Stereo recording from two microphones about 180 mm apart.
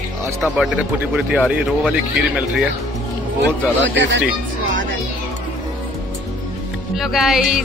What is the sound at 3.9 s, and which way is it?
Speech, 90° right.